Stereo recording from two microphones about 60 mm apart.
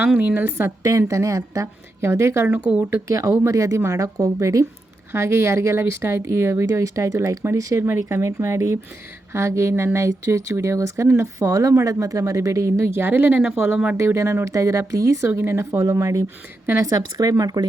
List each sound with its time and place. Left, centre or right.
0.2 s a woman's voice: right
0.5 s speech: right
0.9 s speech: right
1.6 s speech: right
3.1 s a woman's voice: right
5.1 s a woman's voice: right
7.9 s a woman's voice: right
13.0 s speech: right
13.9 s a woman's voice: right
15.3 s speech: right
15.8 s speech: right
16.7 s speech: right